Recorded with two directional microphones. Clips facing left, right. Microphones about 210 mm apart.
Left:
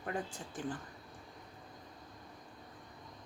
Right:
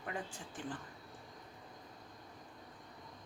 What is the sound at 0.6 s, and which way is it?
Speech, 40° left (ahead or behind).